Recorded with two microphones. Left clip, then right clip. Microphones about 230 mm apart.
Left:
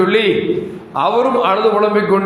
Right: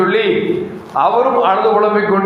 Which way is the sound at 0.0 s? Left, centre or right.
Left.